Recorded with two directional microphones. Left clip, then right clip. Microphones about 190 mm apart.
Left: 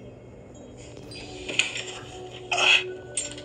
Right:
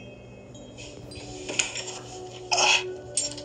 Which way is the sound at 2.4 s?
50° right (ahead or behind).